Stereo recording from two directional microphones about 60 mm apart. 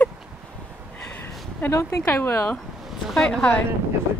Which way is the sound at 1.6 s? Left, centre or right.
Left.